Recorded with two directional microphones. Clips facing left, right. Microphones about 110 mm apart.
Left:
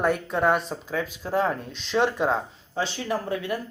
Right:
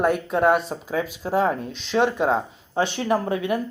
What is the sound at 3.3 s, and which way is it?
Speech, 20° right (ahead or behind).